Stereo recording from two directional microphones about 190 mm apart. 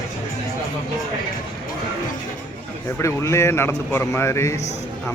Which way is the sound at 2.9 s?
15° left (ahead or behind).